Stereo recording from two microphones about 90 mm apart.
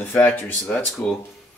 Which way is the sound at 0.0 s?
25° left (ahead or behind).